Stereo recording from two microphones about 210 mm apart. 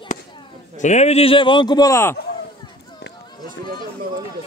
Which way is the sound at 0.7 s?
35° left (ahead or behind).